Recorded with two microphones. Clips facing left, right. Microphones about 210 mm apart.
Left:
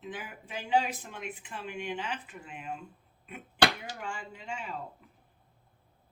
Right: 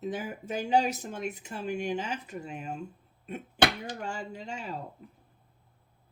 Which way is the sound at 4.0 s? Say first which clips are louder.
Right 4 dB; 40° right (ahead or behind).